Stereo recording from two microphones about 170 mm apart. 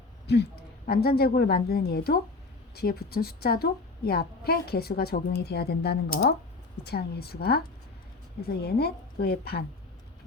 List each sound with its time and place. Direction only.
0.9 s a woman's voice: 65° left (ahead or behind)